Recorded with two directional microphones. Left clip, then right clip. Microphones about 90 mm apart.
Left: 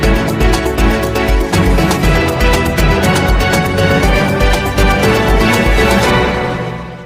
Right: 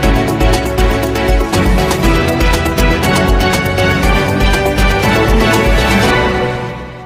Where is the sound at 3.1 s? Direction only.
Centre (ahead or behind).